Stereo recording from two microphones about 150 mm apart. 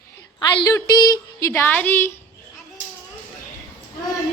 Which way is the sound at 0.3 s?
25° left (ahead or behind).